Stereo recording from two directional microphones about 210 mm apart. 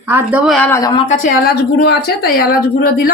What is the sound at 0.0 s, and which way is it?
Speech, 10° right (ahead or behind).